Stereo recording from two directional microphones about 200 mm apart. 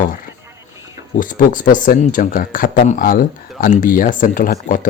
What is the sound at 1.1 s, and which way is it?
Speech, 40° left (ahead or behind).